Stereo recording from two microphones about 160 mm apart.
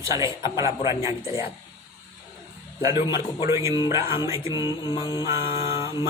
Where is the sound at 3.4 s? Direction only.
20° right (ahead or behind).